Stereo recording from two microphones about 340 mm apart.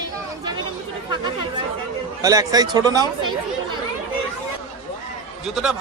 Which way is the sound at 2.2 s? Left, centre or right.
Centre.